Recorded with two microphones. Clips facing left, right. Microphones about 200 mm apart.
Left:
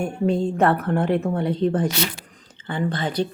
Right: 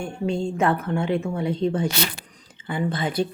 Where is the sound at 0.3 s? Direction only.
5° left (ahead or behind).